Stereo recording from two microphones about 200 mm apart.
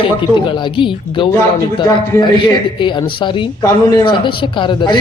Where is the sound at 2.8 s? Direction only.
25° left (ahead or behind).